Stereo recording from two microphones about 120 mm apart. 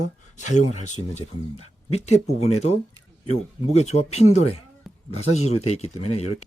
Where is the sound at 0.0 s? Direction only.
85° left.